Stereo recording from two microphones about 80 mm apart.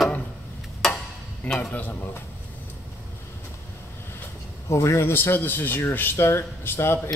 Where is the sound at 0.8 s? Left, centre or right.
Centre.